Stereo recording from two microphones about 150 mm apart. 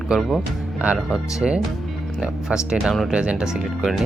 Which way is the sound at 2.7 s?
Centre (ahead or behind).